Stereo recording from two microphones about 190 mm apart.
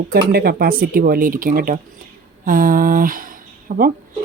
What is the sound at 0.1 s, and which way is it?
Speech, 55° right (ahead or behind).